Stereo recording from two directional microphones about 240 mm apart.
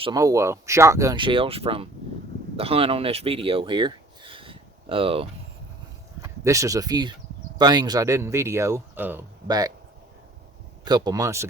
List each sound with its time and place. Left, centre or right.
0.0 s speech: centre
6.2 s speech: centre
10.8 s speech: centre